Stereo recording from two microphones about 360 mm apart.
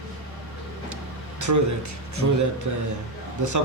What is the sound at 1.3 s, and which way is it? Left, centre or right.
A man's voice, right.